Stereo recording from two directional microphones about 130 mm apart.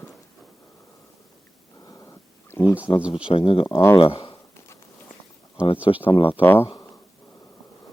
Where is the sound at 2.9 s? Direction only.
35° left (ahead or behind).